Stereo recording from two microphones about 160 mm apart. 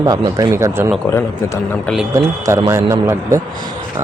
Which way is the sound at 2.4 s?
20° right (ahead or behind).